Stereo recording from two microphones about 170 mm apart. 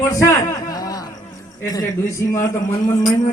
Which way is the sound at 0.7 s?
20° left (ahead or behind).